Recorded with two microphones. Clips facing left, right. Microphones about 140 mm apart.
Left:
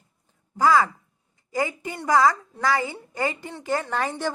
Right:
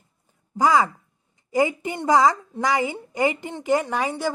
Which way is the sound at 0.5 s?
20° right (ahead or behind).